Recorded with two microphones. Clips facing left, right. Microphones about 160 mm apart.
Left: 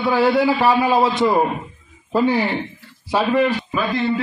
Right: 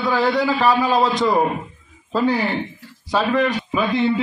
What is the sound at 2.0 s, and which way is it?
A man's voice, 20° left (ahead or behind).